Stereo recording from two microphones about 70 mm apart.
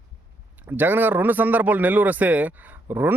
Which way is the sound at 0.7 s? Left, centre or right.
Right.